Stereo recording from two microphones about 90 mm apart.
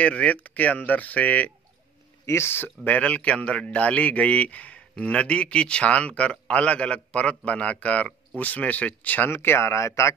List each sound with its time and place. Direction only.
0.0 s speech: 15° left (ahead or behind)
2.2 s speech: 30° left (ahead or behind)